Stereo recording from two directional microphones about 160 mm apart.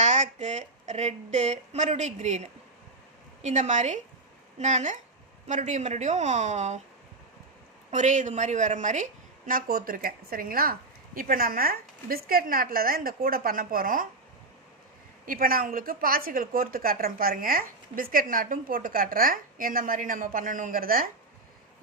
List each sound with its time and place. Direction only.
0.0 s speech: 45° right (ahead or behind)
7.9 s speech: 50° right (ahead or behind)
9.5 s a woman's voice: 65° right (ahead or behind)
15.3 s a woman's voice: 65° right (ahead or behind)